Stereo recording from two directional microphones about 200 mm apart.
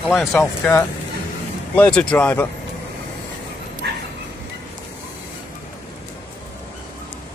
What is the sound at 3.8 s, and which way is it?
Dog, 55° right (ahead or behind).